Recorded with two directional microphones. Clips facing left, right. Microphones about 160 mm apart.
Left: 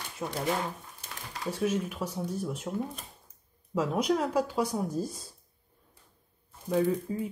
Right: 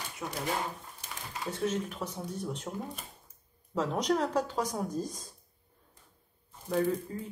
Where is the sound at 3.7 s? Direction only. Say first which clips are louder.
Left 2 dB; 10° left (ahead or behind).